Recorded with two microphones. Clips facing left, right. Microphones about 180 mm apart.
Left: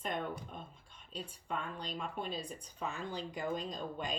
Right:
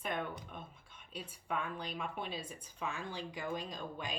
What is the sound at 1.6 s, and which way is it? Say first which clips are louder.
Speech: even; 10° right (ahead or behind).